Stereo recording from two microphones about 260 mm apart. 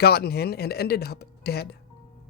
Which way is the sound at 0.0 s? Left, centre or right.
Left.